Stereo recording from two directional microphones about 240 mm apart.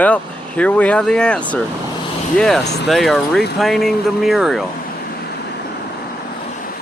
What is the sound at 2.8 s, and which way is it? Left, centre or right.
Speech, centre.